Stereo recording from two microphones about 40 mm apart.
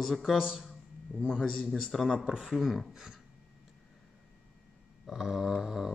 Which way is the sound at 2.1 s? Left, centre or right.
Centre.